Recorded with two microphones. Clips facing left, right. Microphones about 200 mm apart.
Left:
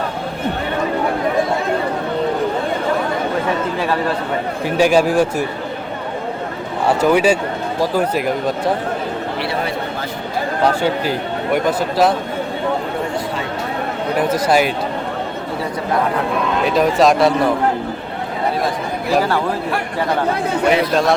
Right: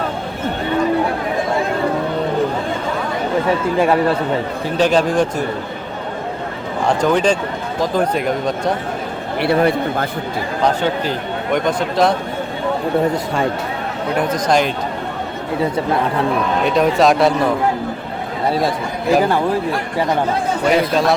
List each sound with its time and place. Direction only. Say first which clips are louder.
4.6 s speech: left 2 dB; 10° left (ahead or behind)
6.8 s speech: left 1 dB; 10° left (ahead or behind)
9.4 s a man's voice: right 11 dB; 55° right (ahead or behind)
11.5 s speech: even; 5° left (ahead or behind)
14.2 s speech: left 1 dB; 5° left (ahead or behind)
16.6 s speech: even; centre (ahead or behind)
20.7 s speech: even; centre (ahead or behind)